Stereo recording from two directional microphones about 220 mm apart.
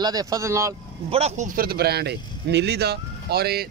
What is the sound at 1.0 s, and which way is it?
Speech, 30° right (ahead or behind).